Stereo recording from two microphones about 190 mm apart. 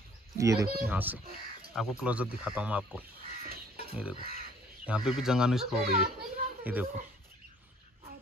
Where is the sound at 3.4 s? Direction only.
50° right (ahead or behind).